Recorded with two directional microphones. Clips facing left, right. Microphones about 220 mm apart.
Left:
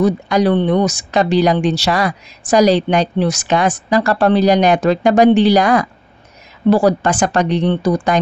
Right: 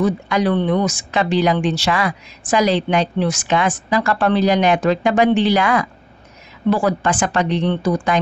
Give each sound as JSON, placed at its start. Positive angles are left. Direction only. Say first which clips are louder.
{"t": 0.0, "sound": "speech", "louder": "left 4 dB", "side_deg": 35}